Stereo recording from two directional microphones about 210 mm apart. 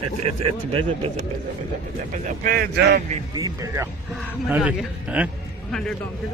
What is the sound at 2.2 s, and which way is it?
Speech, 45° right (ahead or behind).